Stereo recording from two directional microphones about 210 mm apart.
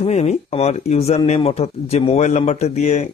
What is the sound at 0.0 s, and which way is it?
Speech, 30° left (ahead or behind).